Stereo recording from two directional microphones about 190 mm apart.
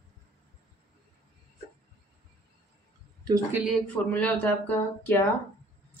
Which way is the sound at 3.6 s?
5° left (ahead or behind).